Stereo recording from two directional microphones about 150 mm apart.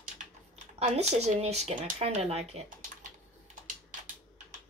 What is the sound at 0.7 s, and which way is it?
Speech, 45° right (ahead or behind).